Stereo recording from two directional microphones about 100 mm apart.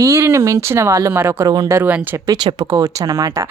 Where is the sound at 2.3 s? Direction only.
50° right (ahead or behind).